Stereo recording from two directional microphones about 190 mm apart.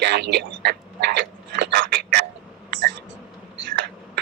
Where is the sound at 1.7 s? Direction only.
60° right (ahead or behind).